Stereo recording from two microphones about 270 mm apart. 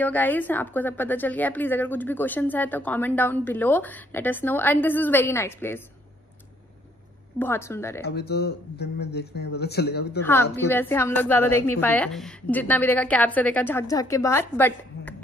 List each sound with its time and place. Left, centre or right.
0.0 s a woman's voice: centre
7.3 s a woman's voice: centre
8.0 s speech: left
10.2 s a woman's voice: centre